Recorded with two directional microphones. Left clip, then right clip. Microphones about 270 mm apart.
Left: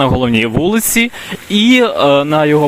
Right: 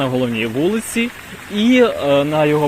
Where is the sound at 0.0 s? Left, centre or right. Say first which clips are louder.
Left 6 dB; left.